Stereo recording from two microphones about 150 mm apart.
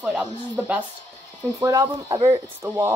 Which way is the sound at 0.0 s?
5° right (ahead or behind).